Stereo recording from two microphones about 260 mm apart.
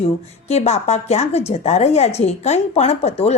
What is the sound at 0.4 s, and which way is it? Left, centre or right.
A woman's voice, left.